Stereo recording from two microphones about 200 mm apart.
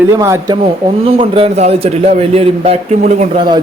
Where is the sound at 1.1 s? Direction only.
30° right (ahead or behind).